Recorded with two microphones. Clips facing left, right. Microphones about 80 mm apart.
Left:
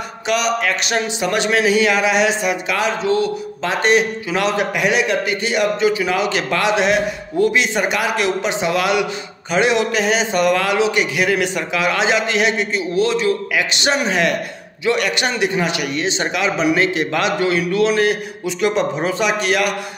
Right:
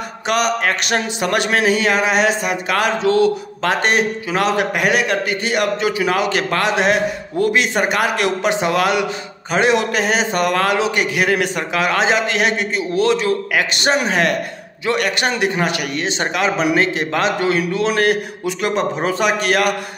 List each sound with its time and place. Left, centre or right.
0.3 s a man's voice: right
3.0 s a man's voice: right